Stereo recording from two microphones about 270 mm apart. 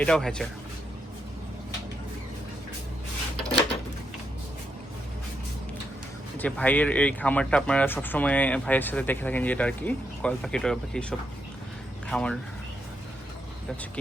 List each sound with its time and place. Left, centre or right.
0.0 s speech: centre
6.4 s speech: centre